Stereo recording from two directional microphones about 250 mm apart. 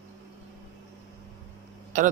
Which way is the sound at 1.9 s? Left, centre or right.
Right.